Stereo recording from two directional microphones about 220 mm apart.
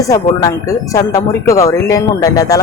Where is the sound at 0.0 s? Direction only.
15° left (ahead or behind).